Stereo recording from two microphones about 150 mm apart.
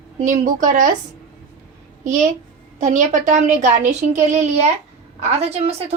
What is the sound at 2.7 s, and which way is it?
A woman's voice, 55° right (ahead or behind).